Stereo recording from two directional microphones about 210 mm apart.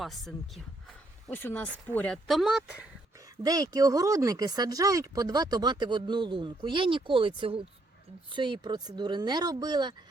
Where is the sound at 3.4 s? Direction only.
15° right (ahead or behind).